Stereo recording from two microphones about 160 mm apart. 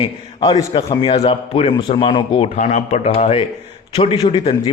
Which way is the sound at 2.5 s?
50° left (ahead or behind).